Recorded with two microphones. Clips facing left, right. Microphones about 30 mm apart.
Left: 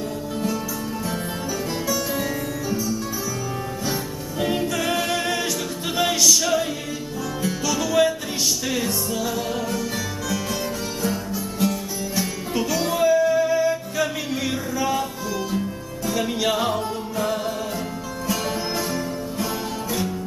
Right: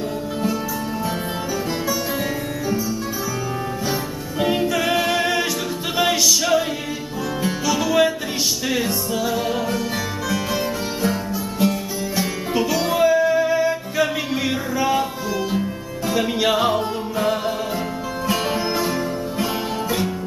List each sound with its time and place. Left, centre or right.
3.8 s music: centre
16.1 s music: centre